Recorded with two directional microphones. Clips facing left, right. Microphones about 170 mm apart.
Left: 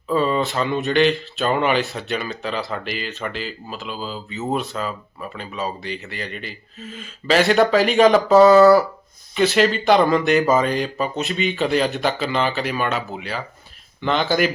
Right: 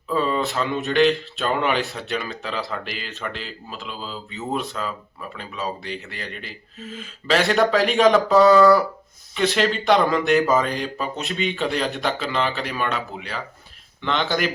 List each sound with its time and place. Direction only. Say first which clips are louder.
0.1 s speech: left 3 dB; centre (ahead or behind)